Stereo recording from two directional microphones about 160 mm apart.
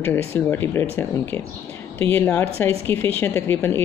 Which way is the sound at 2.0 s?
10° left (ahead or behind).